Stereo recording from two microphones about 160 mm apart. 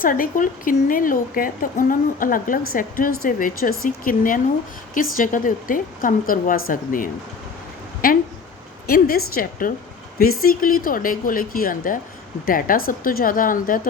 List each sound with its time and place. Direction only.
0.0 s speech: 60° left (ahead or behind)
8.9 s a woman's voice: 65° left (ahead or behind)